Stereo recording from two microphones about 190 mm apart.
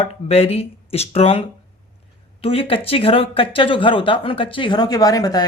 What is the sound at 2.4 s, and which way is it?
Speech, 30° left (ahead or behind).